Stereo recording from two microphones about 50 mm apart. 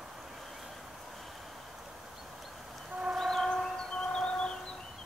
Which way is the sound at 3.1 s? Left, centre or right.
Centre.